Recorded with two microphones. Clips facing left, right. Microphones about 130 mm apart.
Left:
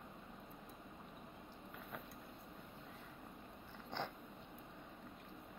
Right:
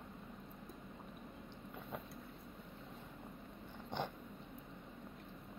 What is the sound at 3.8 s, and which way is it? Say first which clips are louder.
Dog: right 3 dB; 15° right (ahead or behind).